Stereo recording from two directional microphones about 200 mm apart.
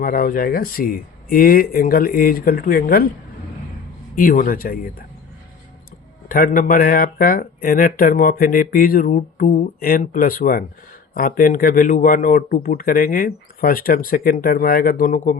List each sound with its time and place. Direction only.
0.0 s speech: 45° left (ahead or behind)
4.1 s speech: 45° left (ahead or behind)
6.2 s speech: 45° left (ahead or behind)